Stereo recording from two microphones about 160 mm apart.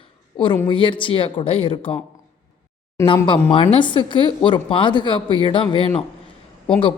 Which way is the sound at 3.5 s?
35° left (ahead or behind).